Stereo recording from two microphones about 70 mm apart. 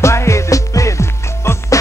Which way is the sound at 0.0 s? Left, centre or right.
Left.